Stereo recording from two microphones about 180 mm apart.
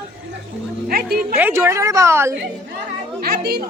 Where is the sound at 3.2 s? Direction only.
60° right (ahead or behind).